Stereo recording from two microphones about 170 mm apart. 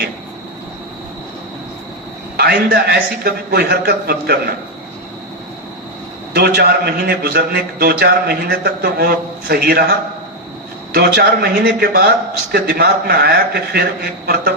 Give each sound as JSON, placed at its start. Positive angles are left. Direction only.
{"t": 2.3, "sound": "speech", "side_deg": -70}
{"t": 6.3, "sound": "speech", "side_deg": -70}
{"t": 10.9, "sound": "speech", "side_deg": -70}